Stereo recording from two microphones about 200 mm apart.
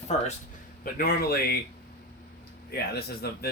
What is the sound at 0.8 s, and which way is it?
Speech, 50° left (ahead or behind).